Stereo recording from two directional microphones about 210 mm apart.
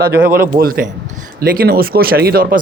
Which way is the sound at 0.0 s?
45° right (ahead or behind).